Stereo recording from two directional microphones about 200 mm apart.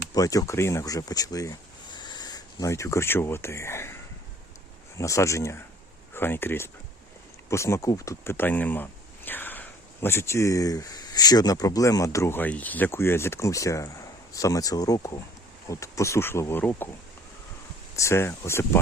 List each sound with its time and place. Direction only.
0.1 s speech: 15° left (ahead or behind)
4.9 s speech: 15° left (ahead or behind)
17.9 s speech: 15° left (ahead or behind)